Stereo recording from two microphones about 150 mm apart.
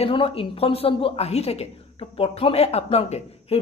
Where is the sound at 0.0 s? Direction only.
35° left (ahead or behind).